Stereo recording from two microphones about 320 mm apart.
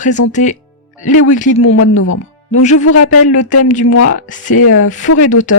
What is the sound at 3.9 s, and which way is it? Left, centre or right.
Speech, left.